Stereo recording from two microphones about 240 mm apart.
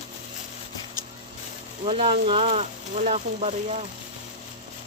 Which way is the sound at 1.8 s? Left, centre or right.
Right.